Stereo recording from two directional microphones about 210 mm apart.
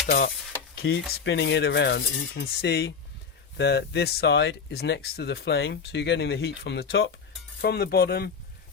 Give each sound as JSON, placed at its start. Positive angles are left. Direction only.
{"t": 0.8, "sound": "speech", "side_deg": 50}